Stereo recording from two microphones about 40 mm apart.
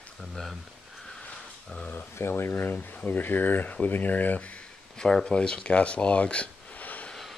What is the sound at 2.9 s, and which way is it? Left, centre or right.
Speech, left.